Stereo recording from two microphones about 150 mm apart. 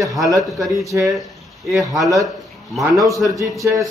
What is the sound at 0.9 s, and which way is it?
Speech, 15° right (ahead or behind).